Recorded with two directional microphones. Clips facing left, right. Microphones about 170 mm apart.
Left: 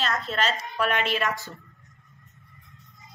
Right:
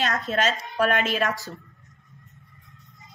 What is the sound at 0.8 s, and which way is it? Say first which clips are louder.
Speech: right 3 dB; 40° right (ahead or behind).